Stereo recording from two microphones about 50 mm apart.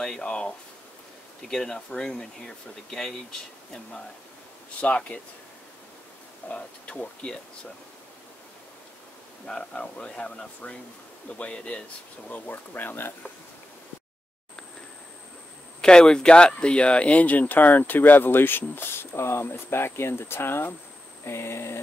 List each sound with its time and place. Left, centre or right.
0.2 s speech: centre
4.9 s speech: left
6.5 s speech: left
9.5 s speech: centre
12.3 s speech: left
15.8 s speech: centre; by 20.7 s left
21.3 s a sound: left